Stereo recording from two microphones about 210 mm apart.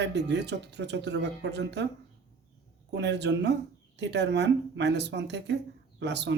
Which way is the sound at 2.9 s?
55° right (ahead or behind).